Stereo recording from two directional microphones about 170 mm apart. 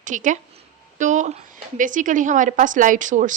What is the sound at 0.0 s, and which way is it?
A woman's voice, 50° right (ahead or behind).